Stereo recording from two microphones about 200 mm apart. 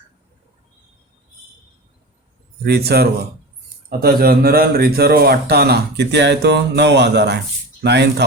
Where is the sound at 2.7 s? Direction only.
55° right (ahead or behind).